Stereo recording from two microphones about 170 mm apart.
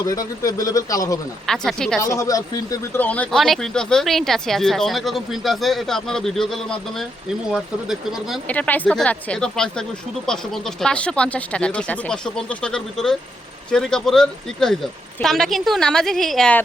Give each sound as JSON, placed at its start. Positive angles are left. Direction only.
{"t": 0.0, "sound": "speech", "side_deg": 20}
{"t": 1.5, "sound": "speech", "side_deg": 5}
{"t": 2.0, "sound": "speech", "side_deg": 15}
{"t": 8.4, "sound": "speech", "side_deg": 10}